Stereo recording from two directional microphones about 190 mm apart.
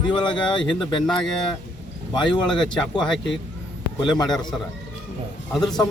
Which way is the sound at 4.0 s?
20° left (ahead or behind).